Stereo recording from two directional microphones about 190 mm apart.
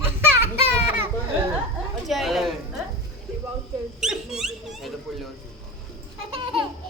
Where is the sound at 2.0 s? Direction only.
Centre (ahead or behind).